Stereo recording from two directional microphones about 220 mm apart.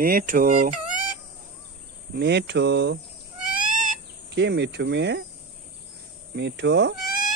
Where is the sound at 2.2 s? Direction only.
50° right (ahead or behind).